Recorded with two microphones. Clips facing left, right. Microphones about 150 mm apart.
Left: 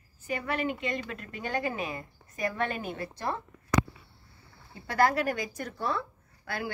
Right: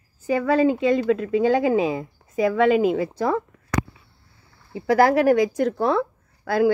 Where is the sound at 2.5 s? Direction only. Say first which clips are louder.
Right 15 dB; 90° right.